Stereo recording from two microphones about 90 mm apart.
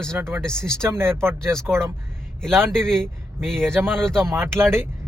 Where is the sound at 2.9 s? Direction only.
5° left (ahead or behind).